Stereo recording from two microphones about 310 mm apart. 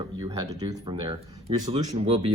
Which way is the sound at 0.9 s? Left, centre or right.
Centre.